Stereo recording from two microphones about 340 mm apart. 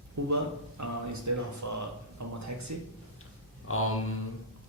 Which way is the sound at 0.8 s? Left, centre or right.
Right.